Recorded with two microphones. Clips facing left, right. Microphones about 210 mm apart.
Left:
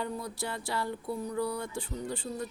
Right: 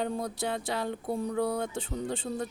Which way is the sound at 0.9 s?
55° right (ahead or behind).